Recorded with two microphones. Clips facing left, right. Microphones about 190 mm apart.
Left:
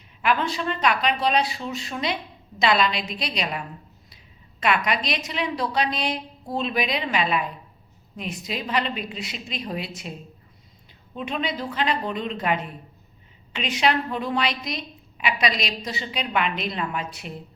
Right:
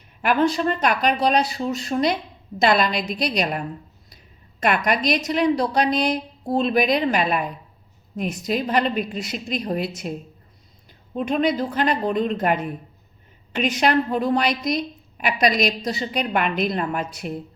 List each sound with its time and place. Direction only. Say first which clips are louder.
0.2 s a woman's voice: right 5 dB; 45° right (ahead or behind)
4.6 s a woman's voice: right 3 dB; 45° right (ahead or behind)